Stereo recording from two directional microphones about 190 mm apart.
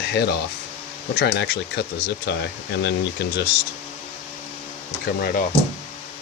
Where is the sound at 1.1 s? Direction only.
60° left (ahead or behind).